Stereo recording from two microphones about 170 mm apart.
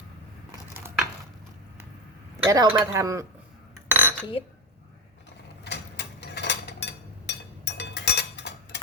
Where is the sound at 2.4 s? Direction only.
20° right (ahead or behind).